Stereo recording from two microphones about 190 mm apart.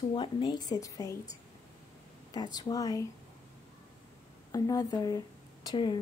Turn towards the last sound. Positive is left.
turn(degrees=25)  # may be behind; listen again after turning